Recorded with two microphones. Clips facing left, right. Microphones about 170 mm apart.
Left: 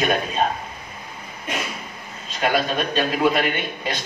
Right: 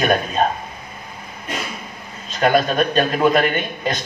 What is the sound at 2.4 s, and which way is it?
A man's voice, 45° right (ahead or behind).